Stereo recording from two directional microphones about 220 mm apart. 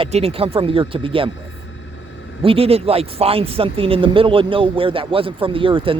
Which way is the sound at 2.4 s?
25° right (ahead or behind).